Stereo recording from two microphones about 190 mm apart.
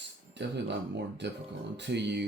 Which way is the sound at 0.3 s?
65° right (ahead or behind).